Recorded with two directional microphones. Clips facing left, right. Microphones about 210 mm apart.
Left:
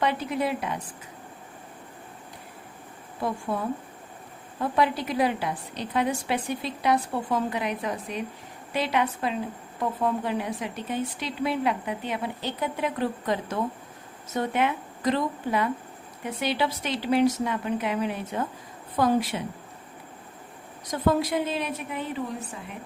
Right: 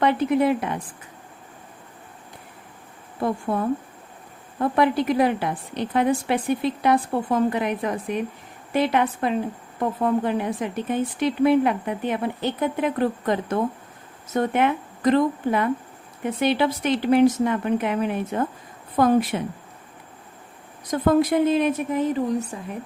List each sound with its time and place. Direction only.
0.0 s speech: 55° right (ahead or behind)
3.5 s speech: 50° right (ahead or behind)
4.7 s a woman's voice: 55° right (ahead or behind)
21.0 s speech: 55° right (ahead or behind)